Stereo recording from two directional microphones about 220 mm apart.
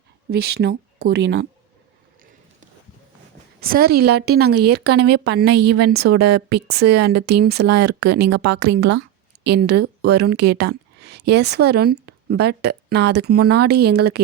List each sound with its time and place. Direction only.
0.3 s speech: 45° right (ahead or behind)
3.6 s speech: 40° right (ahead or behind)